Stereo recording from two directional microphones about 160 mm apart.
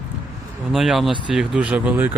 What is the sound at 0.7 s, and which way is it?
Speech, centre (ahead or behind).